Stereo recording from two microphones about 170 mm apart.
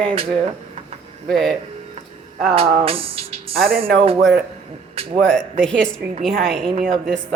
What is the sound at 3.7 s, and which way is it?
Speech, 60° right (ahead or behind).